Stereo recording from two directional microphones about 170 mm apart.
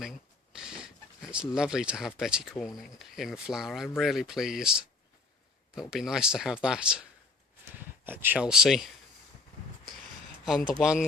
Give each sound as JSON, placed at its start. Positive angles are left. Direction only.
{"t": 0.0, "sound": "speech", "side_deg": -5}
{"t": 10.4, "sound": "speech", "side_deg": 0}